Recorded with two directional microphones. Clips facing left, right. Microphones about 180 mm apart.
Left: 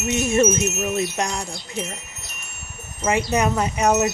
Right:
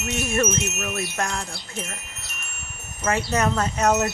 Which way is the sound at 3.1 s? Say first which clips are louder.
Left 2 dB; 15° left (ahead or behind).